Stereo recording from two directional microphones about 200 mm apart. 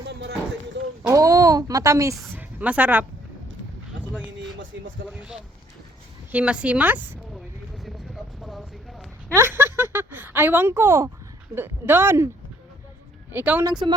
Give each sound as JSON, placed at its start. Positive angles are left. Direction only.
{"t": 0.0, "sound": "a sound", "side_deg": -55}
{"t": 1.1, "sound": "a woman's voice", "side_deg": -15}
{"t": 5.0, "sound": "a woman's voice", "side_deg": -5}
{"t": 7.9, "sound": "a sound", "side_deg": 0}
{"t": 9.3, "sound": "a woman's voice", "side_deg": -10}
{"t": 13.3, "sound": "a woman's voice", "side_deg": -10}
{"t": 13.7, "sound": "speech", "side_deg": -20}